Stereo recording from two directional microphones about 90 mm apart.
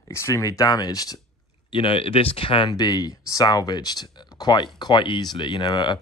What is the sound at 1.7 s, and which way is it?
Speech, 85° left.